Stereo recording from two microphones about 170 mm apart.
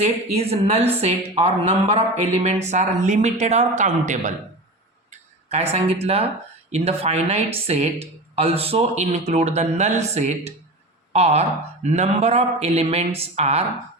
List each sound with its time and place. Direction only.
0.0 s speech: 40° right (ahead or behind)
5.5 s speech: 40° right (ahead or behind)